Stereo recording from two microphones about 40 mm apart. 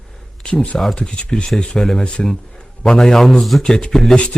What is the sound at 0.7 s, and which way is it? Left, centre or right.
Speech, centre.